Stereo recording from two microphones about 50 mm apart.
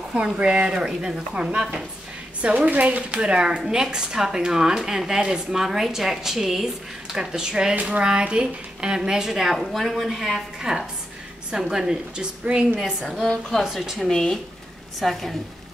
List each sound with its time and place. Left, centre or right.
0.1 s speech: centre
1.6 s speech: centre
2.4 s a woman's voice: right
12.8 s a woman's voice: centre
14.0 s a woman's voice: centre